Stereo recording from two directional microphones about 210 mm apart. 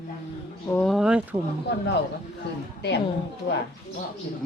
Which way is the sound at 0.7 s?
Centre (ahead or behind).